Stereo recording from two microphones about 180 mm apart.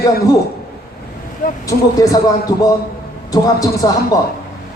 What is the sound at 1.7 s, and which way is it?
A man's voice, 20° left (ahead or behind).